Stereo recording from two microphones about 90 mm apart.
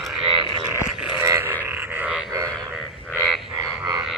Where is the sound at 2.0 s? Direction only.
15° right (ahead or behind).